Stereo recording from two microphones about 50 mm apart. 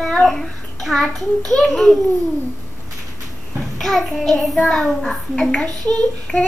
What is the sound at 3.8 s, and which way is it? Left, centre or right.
A child's voice, centre.